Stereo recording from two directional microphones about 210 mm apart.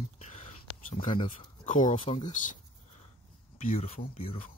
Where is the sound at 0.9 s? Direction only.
35° left (ahead or behind).